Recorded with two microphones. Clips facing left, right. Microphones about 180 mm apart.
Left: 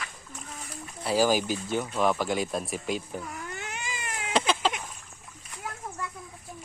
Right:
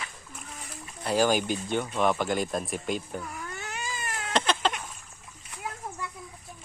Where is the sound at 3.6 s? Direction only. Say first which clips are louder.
Right 1 dB; 20° left (ahead or behind).